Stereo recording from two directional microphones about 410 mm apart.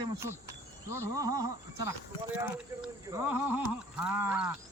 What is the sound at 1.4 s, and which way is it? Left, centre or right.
Speech, right.